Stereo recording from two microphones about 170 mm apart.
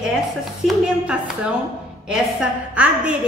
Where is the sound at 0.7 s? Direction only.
5° right (ahead or behind).